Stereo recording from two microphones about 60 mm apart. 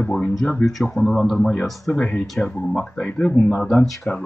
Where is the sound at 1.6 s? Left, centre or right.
Centre.